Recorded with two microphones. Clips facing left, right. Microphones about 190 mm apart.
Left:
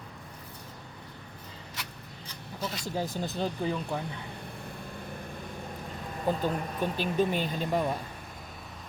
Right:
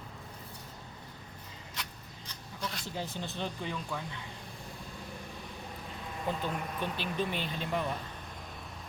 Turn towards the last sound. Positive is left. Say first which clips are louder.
# left 5 dB
turn(degrees=40)  # may be behind; listen again after turning